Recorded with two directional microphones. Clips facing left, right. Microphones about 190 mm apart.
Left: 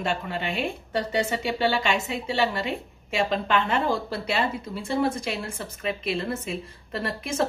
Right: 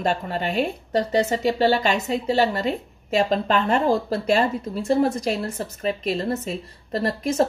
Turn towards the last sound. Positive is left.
turn(degrees=-40)  # may be behind; listen again after turning